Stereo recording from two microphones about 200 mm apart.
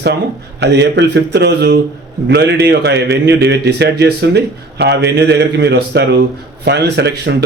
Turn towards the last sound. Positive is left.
turn(degrees=-55)  # may be behind; listen again after turning